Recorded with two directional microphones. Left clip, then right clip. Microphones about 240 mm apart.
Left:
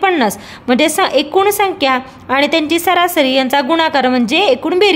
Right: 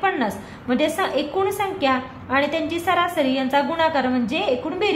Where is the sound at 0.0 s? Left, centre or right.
Left.